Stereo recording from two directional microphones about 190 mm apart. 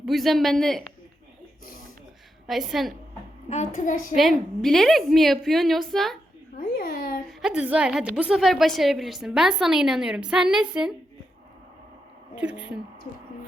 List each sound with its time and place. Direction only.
0.0 s a woman's voice: centre (ahead or behind)
2.5 s a woman's voice: centre (ahead or behind)
3.5 s a woman's voice: 40° left (ahead or behind)
4.1 s a woman's voice: centre (ahead or behind)
6.6 s babbling: 50° left (ahead or behind)
7.3 s a woman's voice: 5° right (ahead or behind)
12.4 s speech: 5° right (ahead or behind)